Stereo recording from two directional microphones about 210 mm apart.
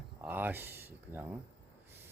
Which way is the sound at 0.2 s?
10° right (ahead or behind).